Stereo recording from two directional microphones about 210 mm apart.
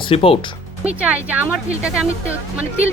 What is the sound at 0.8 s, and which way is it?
Speech, 5° right (ahead or behind).